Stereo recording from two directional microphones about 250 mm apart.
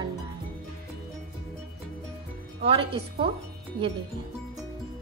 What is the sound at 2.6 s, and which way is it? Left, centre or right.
Speech, right.